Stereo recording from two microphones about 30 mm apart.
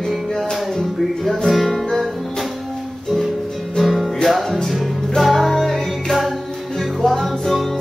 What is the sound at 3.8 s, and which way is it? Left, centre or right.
Music, centre.